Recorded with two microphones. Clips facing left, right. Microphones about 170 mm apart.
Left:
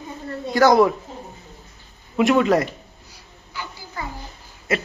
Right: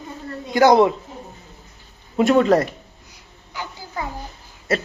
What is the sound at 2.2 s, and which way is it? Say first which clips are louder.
Speech: right 2 dB; 35° right (ahead or behind).